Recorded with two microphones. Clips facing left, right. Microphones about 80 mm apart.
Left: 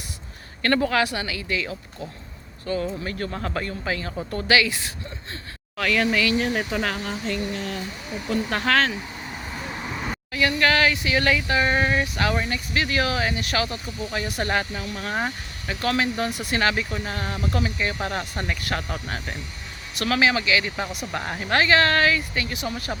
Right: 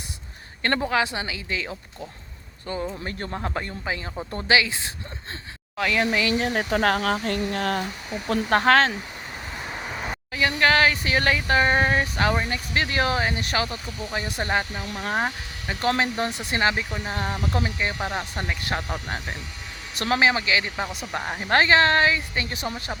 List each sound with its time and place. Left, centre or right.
0.6 s speech: right
7.0 s speech: right
8.3 s speech: right
9.5 s vehicle: centre
10.3 s speech: right
16.9 s speech: centre
17.9 s speech: centre; by 20.7 s right
21.1 s speech: centre
21.5 s speech: right